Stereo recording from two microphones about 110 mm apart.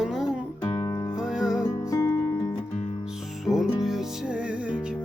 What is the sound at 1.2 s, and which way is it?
Music, 5° right (ahead or behind).